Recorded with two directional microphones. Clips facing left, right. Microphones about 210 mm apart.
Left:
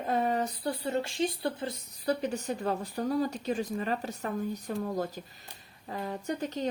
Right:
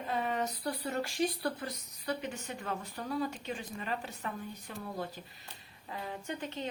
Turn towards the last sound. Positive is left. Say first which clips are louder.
# left 6 dB
turn(degrees=40)  # may be behind; listen again after turning